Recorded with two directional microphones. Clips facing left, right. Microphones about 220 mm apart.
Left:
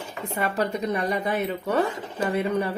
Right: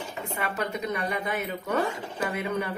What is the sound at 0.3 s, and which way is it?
Speech, 35° left (ahead or behind).